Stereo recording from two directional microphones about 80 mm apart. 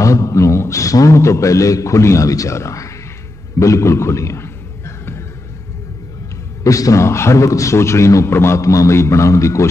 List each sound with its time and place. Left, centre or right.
0.0 s a man's voice: left
3.5 s a sound: left
6.6 s a man's voice: left